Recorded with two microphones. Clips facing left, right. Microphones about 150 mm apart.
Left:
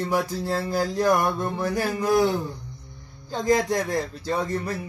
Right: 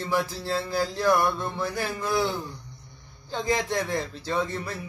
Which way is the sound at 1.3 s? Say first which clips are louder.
Left 3 dB; 45° left (ahead or behind).